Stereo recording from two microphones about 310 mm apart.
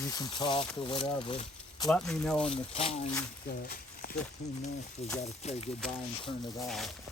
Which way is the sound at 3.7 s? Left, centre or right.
Left.